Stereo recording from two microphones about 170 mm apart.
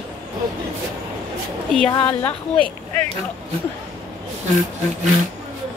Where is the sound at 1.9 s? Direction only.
25° left (ahead or behind).